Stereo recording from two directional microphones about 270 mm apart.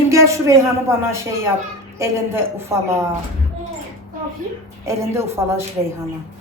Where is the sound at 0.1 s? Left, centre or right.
Centre.